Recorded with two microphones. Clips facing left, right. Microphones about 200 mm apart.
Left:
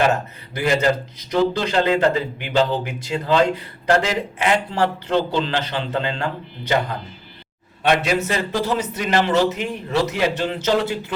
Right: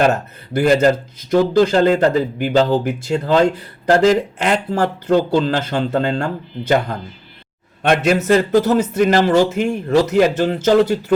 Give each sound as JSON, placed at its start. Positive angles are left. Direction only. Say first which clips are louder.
{"t": 0.5, "sound": "speech", "louder": "right 6 dB", "side_deg": -50}